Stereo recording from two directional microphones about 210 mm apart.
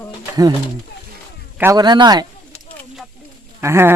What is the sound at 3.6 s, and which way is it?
Speech, 10° right (ahead or behind).